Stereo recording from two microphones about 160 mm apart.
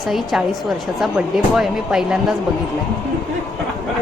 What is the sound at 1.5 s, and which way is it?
Speech, 5° right (ahead or behind).